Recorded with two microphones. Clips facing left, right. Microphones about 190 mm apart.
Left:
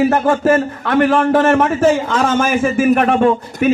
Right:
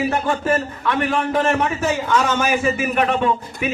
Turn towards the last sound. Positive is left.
turn(degrees=45)  # may be behind; listen again after turning